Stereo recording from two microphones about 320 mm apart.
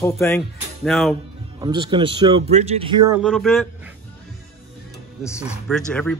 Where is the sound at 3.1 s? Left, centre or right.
Centre.